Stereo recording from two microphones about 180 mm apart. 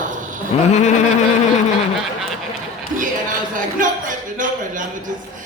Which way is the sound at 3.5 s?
45° right (ahead or behind).